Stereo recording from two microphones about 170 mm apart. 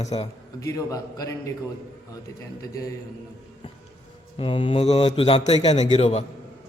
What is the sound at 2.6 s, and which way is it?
Speech, 20° left (ahead or behind).